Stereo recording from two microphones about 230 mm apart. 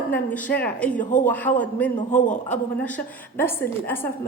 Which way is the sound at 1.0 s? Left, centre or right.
Left.